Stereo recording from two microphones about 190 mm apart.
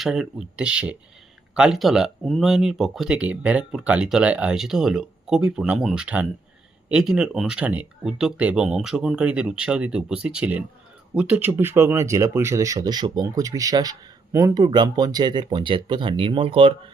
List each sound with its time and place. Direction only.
0.0 s speech: centre (ahead or behind); by 16.7 s 30° right (ahead or behind)